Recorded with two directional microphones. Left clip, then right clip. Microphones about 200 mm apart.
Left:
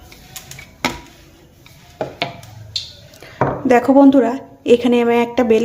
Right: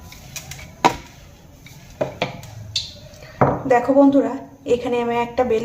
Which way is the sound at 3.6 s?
45° left (ahead or behind).